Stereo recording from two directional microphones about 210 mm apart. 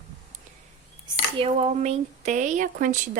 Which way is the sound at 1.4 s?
25° right (ahead or behind).